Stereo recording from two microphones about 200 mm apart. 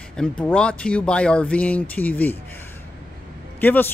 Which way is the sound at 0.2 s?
5° left (ahead or behind).